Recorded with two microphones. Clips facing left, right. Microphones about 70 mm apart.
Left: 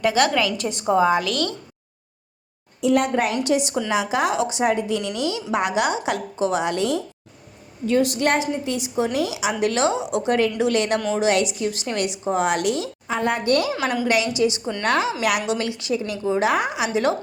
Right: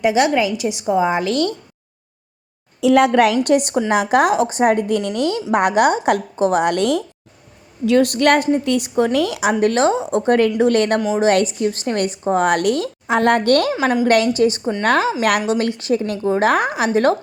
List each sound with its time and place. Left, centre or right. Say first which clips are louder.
0.0 s a woman's voice: right 4 dB; centre
0.5 s a woman's voice: right 2 dB; centre
1.0 s a woman's voice: right 2 dB; right
2.8 s a woman's voice: right 7 dB; right
3.4 s a woman's voice: right 5 dB; right
13.1 s a woman's voice: right 7 dB; right
14.3 s a woman's voice: right 4 dB; right
14.6 s a woman's voice: right 6 dB; right
14.8 s a woman's voice: right 4 dB; right